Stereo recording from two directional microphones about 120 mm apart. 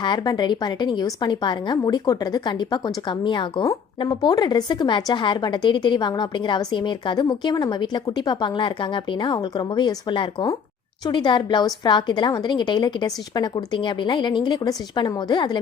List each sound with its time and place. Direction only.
0.0 s a woman's voice: 40° left (ahead or behind)